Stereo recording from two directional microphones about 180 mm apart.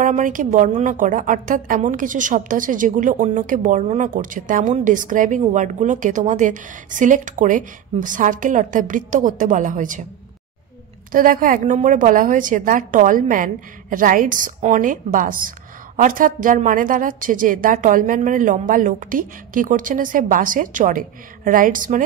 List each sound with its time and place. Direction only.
0.0 s a woman's voice: 45° right (ahead or behind)
11.1 s a woman's voice: 50° right (ahead or behind)